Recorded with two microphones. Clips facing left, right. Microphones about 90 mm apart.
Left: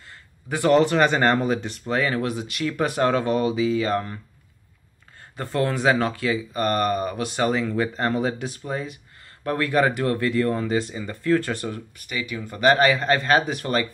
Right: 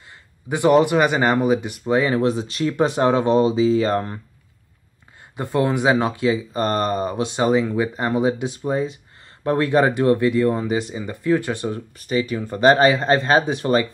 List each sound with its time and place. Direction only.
0.5 s speech: 15° right (ahead or behind); by 4.2 s 30° right (ahead or behind)
5.3 s speech: 15° right (ahead or behind)
12.0 s speech: 35° right (ahead or behind)